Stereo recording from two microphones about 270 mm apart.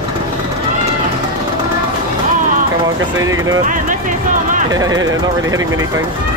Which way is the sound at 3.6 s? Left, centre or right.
Right.